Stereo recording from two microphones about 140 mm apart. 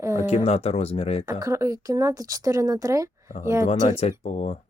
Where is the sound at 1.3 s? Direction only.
20° right (ahead or behind).